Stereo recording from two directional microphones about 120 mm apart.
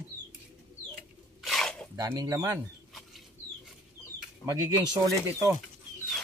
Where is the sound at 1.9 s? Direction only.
30° right (ahead or behind).